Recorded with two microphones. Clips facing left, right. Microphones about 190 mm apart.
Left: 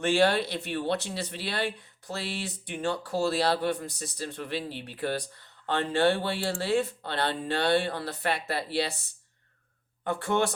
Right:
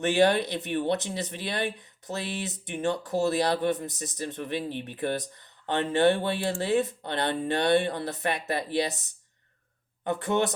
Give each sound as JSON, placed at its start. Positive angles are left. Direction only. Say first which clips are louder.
{"t": 0.0, "sound": "speech", "louder": "right 1 dB", "side_deg": -20}
{"t": 10.1, "sound": "speech", "louder": "right 1 dB", "side_deg": -20}